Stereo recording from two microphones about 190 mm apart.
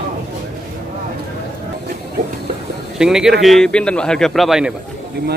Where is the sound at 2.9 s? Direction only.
5° right (ahead or behind).